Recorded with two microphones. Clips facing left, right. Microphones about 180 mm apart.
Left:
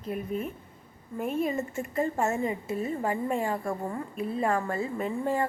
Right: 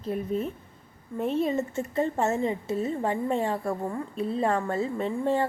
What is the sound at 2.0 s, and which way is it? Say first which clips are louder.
Speech: right 1 dB; 10° left (ahead or behind).